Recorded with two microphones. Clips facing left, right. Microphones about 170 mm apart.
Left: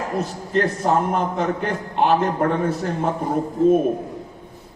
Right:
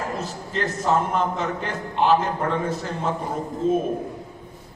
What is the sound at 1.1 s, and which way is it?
A man's voice, 55° left (ahead or behind).